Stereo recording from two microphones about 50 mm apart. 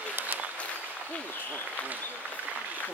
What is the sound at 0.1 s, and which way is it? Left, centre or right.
Applause, right.